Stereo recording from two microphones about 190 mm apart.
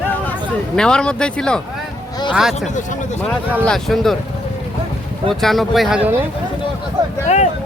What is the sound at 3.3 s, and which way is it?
Speech, 5° left (ahead or behind).